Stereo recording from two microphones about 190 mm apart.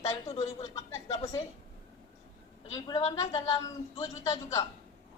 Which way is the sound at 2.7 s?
20° left (ahead or behind).